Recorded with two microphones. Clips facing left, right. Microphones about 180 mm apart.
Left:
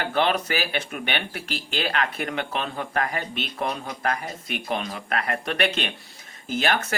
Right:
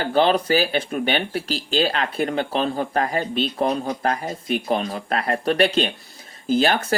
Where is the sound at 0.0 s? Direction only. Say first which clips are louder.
Right 5 dB; 35° right (ahead or behind).